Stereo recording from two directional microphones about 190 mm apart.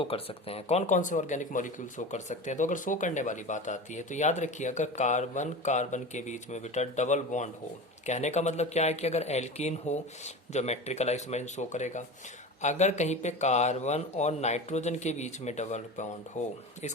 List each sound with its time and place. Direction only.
0.0 s speech: 30° left (ahead or behind)